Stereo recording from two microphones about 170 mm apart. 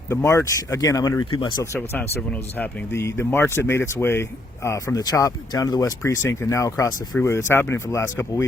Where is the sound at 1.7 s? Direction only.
15° left (ahead or behind).